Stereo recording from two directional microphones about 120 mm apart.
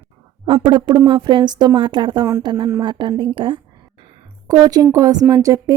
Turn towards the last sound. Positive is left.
turn(degrees=-30)  # may be behind; listen again after turning